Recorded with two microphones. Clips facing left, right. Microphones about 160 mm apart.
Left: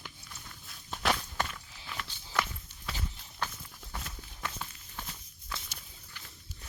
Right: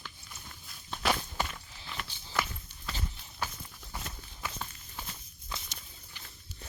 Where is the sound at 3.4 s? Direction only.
10° right (ahead or behind).